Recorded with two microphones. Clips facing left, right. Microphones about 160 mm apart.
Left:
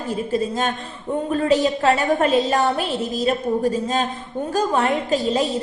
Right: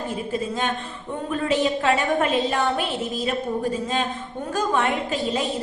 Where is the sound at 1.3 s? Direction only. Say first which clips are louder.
Left 3 dB; 35° left (ahead or behind).